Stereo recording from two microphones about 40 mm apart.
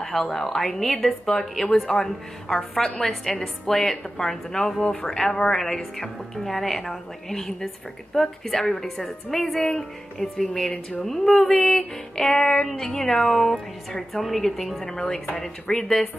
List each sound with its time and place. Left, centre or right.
0.0 s a woman's voice: centre
5.9 s a woman's voice: centre